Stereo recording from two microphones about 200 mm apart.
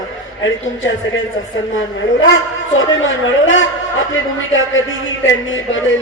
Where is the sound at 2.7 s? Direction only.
70° left (ahead or behind).